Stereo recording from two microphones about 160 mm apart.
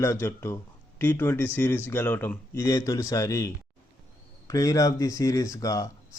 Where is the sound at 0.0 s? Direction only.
15° left (ahead or behind).